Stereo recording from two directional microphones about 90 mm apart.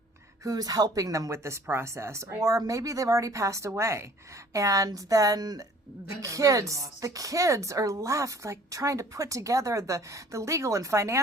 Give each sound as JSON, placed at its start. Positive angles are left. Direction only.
{"t": 0.4, "sound": "speech", "side_deg": -45}